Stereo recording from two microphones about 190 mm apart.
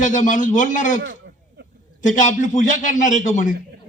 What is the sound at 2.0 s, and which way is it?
A man's voice, 40° left (ahead or behind).